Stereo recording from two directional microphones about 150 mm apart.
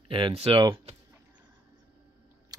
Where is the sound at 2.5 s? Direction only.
25° right (ahead or behind).